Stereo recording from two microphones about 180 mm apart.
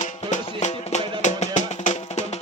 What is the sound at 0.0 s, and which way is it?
Music, 40° left (ahead or behind).